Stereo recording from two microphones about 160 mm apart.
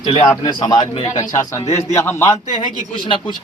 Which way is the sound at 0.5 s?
30° left (ahead or behind).